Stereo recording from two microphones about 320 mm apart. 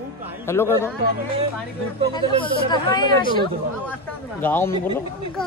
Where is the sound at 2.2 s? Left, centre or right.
Centre.